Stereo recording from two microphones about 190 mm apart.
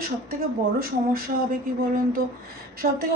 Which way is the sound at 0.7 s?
50° right (ahead or behind).